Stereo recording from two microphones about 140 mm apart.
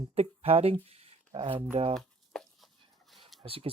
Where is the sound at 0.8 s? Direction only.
45° right (ahead or behind).